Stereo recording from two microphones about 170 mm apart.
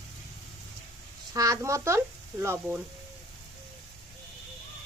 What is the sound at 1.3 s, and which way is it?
A woman's voice, 20° right (ahead or behind).